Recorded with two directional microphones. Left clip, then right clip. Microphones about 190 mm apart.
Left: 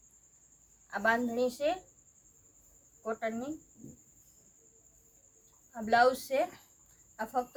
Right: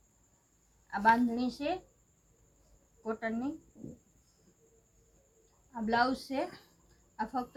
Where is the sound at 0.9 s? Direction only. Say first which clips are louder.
Right 3 dB; 50° left (ahead or behind).